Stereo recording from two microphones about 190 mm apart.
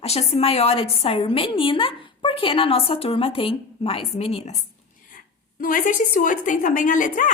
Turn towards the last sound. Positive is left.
turn(degrees=45)  # may be behind; listen again after turning